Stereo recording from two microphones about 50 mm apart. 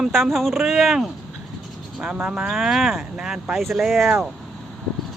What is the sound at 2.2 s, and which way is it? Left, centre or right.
Speech, centre.